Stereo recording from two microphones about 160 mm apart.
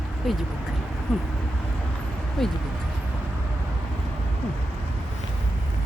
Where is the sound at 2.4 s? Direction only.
Centre (ahead or behind).